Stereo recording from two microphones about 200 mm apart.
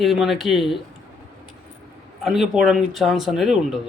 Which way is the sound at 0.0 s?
Centre (ahead or behind).